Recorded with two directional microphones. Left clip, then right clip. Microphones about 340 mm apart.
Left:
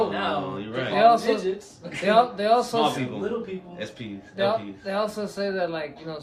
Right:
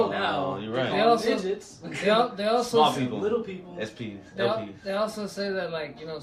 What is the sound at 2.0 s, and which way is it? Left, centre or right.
Speech, centre.